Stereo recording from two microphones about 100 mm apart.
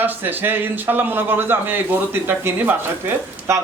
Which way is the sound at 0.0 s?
20° right (ahead or behind).